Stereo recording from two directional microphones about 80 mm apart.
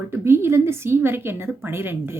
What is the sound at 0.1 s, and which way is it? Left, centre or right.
A woman's voice, right.